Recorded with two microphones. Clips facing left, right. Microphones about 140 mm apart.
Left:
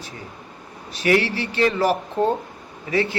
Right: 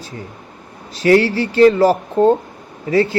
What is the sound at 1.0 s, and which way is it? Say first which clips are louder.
Speech: right 7 dB; 30° right (ahead or behind).